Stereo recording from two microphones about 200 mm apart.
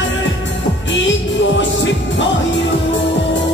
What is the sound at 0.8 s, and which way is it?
Music, 65° left (ahead or behind).